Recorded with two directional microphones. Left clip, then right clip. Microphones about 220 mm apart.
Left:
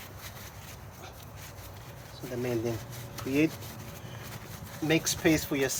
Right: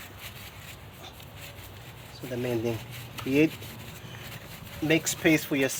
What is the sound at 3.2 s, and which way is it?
Speech, 40° right (ahead or behind).